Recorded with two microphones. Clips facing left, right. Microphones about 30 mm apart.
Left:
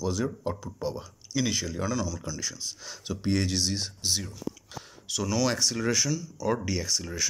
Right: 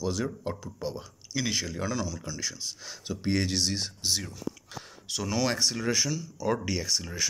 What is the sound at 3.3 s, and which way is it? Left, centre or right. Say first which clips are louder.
Speech: even; centre.